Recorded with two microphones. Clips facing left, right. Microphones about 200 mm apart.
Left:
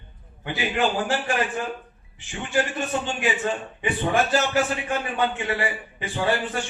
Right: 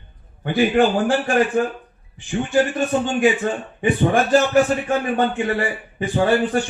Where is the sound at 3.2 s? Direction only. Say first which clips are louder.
Right 7 dB; 45° right (ahead or behind).